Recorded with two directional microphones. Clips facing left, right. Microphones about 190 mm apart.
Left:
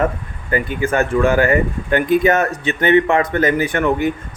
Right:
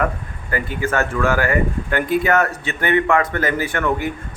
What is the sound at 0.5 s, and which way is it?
Speech, 20° left (ahead or behind).